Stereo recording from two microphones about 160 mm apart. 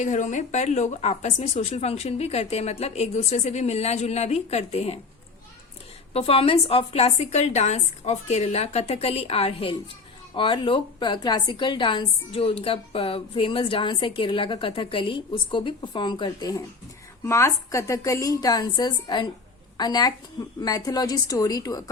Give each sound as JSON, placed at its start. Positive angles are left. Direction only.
{"t": 0.0, "sound": "a woman's voice", "side_deg": 50}
{"t": 6.1, "sound": "a woman's voice", "side_deg": 35}